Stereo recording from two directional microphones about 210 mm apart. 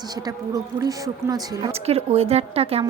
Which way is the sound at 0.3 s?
15° right (ahead or behind).